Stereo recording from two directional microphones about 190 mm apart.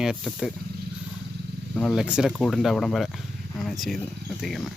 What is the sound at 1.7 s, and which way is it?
Speech, centre (ahead or behind).